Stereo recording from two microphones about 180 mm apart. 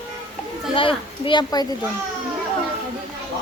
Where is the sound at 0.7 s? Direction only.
30° left (ahead or behind).